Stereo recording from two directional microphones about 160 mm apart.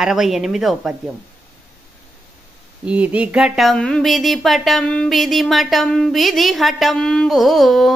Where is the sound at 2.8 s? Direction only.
10° right (ahead or behind).